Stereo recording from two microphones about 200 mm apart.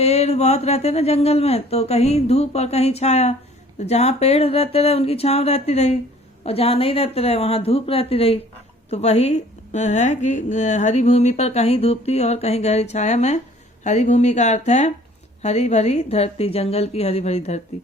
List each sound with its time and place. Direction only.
0.0 s a woman's voice: 30° left (ahead or behind)